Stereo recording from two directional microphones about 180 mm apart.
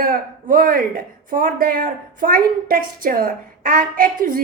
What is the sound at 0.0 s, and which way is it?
A woman's voice, 50° right (ahead or behind).